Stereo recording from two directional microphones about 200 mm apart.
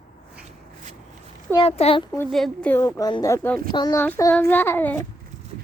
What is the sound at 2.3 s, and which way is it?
A woman's voice, 5° left (ahead or behind).